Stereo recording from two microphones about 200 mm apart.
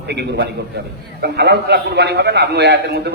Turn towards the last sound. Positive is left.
turn(degrees=-55)  # may be behind; listen again after turning